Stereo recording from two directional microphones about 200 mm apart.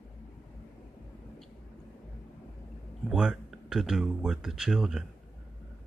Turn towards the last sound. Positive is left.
turn(degrees=0)  # may be behind; listen again after turning